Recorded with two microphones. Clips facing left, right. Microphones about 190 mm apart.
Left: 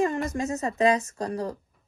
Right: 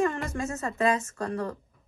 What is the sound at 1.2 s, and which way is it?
Speech, 35° left (ahead or behind).